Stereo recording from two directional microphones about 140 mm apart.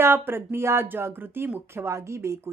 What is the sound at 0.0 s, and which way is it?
Speech, 15° right (ahead or behind).